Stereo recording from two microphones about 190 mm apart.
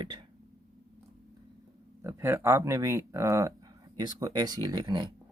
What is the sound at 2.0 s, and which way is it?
Speech, 15° right (ahead or behind).